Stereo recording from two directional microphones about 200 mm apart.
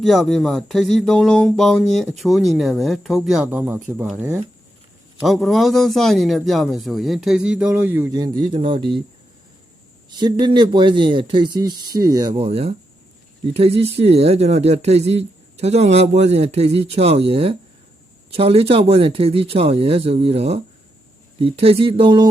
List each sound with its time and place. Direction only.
0.0 s a man's voice: centre (ahead or behind); by 9.0 s 25° right (ahead or behind)
10.1 s speech: 20° right (ahead or behind)